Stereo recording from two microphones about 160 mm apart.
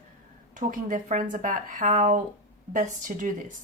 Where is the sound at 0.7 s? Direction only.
55° right (ahead or behind).